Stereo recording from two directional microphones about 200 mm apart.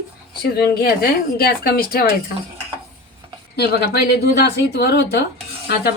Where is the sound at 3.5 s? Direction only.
55° left (ahead or behind).